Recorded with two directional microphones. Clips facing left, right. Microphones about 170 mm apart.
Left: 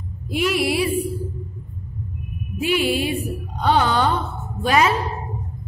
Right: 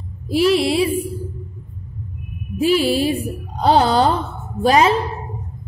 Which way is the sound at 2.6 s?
35° right (ahead or behind).